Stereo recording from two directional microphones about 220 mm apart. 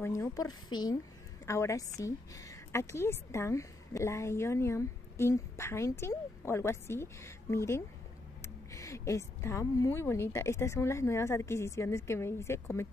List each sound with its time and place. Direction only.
0.0 s a woman's voice: 15° left (ahead or behind)